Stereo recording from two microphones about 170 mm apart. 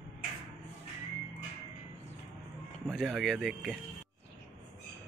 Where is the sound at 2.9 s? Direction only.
Centre (ahead or behind).